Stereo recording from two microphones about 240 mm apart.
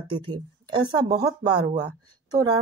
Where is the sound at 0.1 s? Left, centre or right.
Centre.